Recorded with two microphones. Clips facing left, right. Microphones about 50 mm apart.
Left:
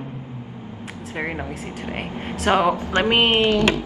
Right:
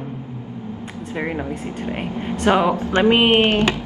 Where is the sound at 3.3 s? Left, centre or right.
Right.